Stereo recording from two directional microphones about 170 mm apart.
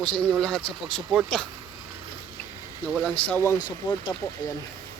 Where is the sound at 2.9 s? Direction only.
5° left (ahead or behind); by 4.5 s 20° left (ahead or behind).